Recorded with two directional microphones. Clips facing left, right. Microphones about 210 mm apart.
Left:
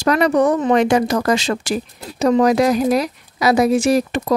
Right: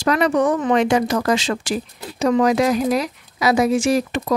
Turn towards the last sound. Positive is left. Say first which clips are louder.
# left 2 dB
turn(degrees=35)  # may be behind; listen again after turning